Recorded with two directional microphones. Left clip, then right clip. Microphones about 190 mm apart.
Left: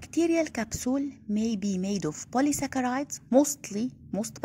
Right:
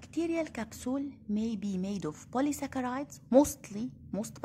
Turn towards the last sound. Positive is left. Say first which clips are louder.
# left 5 dB
turn(degrees=10)  # may be behind; listen again after turning